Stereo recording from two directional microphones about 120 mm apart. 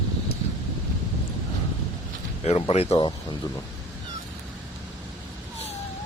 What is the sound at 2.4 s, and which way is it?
Speech, 60° left (ahead or behind).